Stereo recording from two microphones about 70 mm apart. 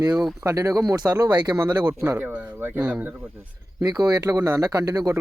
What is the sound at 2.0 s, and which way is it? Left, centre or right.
Speech, right.